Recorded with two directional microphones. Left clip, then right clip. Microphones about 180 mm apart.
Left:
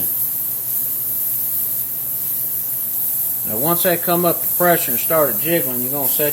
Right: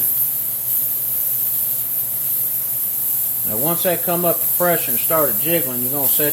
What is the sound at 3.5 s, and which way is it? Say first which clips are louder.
Speech: left 2 dB; centre (ahead or behind).